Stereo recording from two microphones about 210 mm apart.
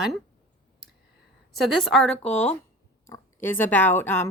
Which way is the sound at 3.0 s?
10° left (ahead or behind).